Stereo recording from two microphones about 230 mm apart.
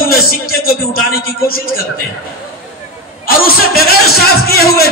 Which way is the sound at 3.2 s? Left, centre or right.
Left.